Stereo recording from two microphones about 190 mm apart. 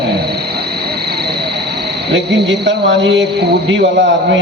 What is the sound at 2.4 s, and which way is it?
A man's voice, 70° right (ahead or behind).